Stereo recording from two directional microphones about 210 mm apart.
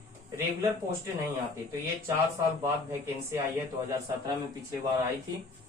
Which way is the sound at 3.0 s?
15° right (ahead or behind).